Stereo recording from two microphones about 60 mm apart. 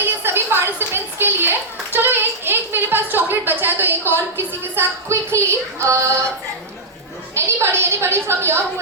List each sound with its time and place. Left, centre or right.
0.0 s a sound: right
4.7 s female singing: right
7.3 s female singing: right